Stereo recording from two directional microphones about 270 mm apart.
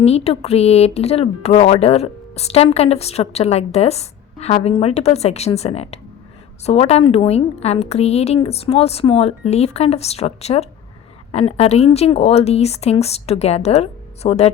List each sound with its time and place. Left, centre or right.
0.0 s speech: left